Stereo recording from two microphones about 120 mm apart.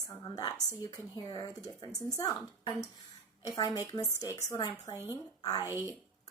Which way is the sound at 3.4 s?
35° left (ahead or behind).